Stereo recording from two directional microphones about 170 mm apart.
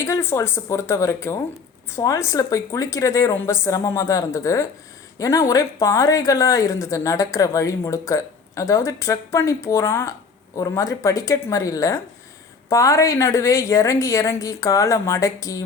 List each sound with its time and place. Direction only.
0.0 s a woman's voice: 15° left (ahead or behind)